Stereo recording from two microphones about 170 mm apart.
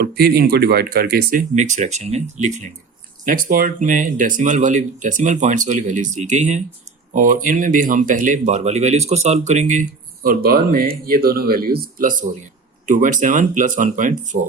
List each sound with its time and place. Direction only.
0.0 s speech: 65° right (ahead or behind); by 2.6 s 40° right (ahead or behind)
3.2 s speech: 55° right (ahead or behind)
10.2 s speech: 60° right (ahead or behind)